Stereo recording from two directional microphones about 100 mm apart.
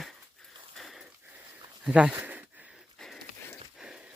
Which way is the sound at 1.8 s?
10° right (ahead or behind).